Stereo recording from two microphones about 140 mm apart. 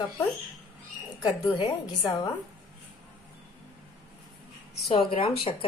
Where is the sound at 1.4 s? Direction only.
35° left (ahead or behind).